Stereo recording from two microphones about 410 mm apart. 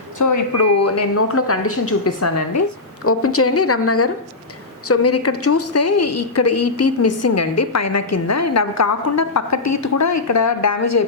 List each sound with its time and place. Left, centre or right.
0.2 s a woman's voice: left